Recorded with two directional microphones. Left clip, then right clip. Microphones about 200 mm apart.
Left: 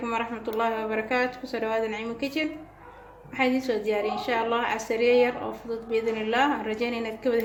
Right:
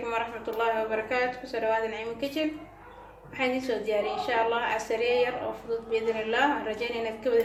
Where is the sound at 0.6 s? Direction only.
55° left (ahead or behind).